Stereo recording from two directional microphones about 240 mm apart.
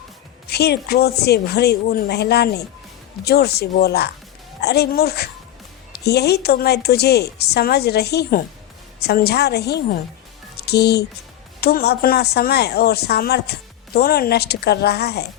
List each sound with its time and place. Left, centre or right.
0.5 s a woman's voice: left